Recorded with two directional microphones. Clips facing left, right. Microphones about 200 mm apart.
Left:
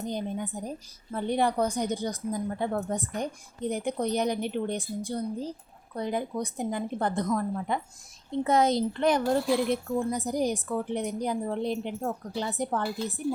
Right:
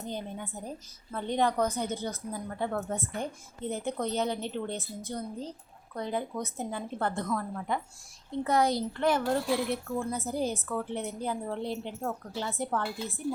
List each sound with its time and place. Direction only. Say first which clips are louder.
0.0 s a woman's voice: left 5 dB; 15° left (ahead or behind)